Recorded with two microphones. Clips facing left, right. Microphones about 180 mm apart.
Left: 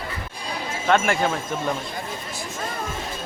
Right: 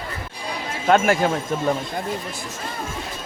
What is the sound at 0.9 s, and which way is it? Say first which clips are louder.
Speech: right 3 dB; 40° right (ahead or behind).